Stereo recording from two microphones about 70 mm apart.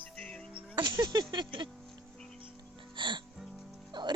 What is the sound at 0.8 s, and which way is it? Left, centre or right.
Speech, right.